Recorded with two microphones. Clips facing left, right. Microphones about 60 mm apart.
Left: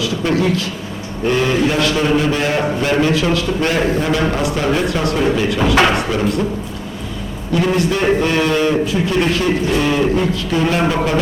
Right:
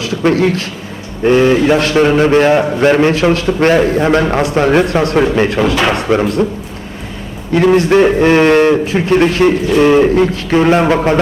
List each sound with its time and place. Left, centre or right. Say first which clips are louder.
0.2 s speech: right 7 dB; right
1.2 s a man's voice: right 6 dB; right
7.5 s a man's voice: right 6 dB; right
7.9 s speech: right 7 dB; right
9.7 s a man's voice: right 11 dB; right
10.2 s speech: right 6 dB; right